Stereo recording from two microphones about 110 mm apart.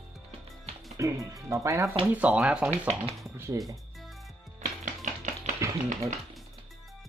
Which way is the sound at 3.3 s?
30° right (ahead or behind).